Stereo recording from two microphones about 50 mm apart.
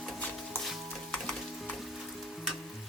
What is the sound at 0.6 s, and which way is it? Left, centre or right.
Sizzle, centre.